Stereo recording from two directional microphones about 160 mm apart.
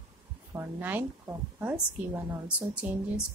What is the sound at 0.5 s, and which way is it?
A woman's voice, 15° right (ahead or behind).